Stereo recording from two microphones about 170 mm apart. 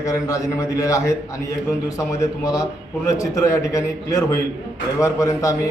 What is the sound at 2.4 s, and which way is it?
A man's voice, 20° left (ahead or behind).